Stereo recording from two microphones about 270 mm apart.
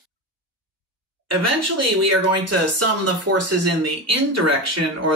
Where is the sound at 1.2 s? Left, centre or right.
Right.